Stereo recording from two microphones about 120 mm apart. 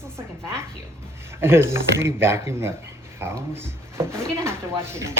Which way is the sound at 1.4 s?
20° right (ahead or behind).